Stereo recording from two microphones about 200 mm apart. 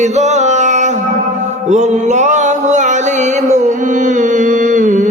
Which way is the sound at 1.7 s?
35° right (ahead or behind).